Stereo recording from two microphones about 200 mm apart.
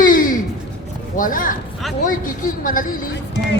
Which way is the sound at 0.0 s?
45° left (ahead or behind).